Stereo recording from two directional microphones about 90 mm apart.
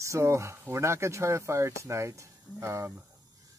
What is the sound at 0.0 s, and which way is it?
Speech, 30° right (ahead or behind).